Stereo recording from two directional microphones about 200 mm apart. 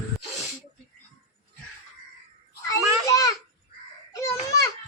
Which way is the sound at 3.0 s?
15° left (ahead or behind).